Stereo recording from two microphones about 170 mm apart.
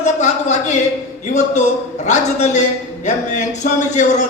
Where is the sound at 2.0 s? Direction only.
45° left (ahead or behind).